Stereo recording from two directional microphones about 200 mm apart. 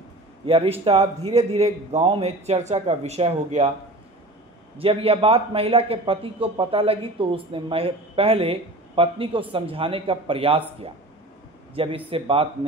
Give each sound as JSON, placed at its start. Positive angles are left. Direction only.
{"t": 0.5, "sound": "a man's voice", "side_deg": -30}
{"t": 4.7, "sound": "a man's voice", "side_deg": -30}